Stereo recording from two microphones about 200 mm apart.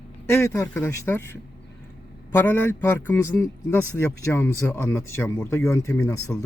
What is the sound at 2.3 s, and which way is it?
Speech, 10° left (ahead or behind).